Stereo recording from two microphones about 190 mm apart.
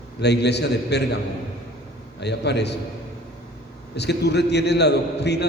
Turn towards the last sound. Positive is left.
turn(degrees=60)  # may be behind; listen again after turning